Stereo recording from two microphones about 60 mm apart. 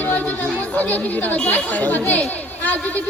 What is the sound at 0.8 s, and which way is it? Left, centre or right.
Speech, left.